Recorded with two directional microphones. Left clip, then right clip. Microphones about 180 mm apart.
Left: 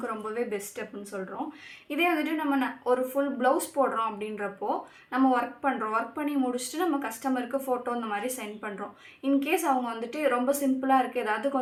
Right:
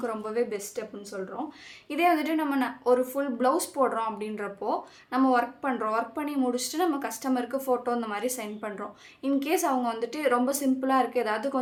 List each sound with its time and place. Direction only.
0.0 s speech: 35° right (ahead or behind)